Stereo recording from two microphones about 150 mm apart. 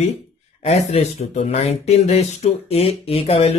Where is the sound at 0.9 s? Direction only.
45° left (ahead or behind).